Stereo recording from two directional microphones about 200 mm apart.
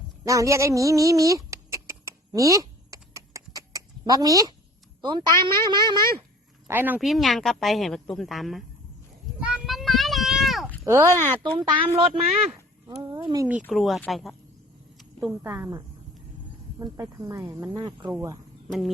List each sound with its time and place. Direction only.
0.3 s a sound: 15° right (ahead or behind)
5.0 s speech: 20° right (ahead or behind)
6.7 s speech: 10° right (ahead or behind)
9.4 s a sound: 5° right (ahead or behind)
10.8 s speech: 15° right (ahead or behind)
13.7 s a woman's voice: centre (ahead or behind); by 18.3 s 15° right (ahead or behind)